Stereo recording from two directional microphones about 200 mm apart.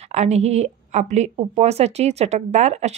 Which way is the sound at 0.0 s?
35° right (ahead or behind).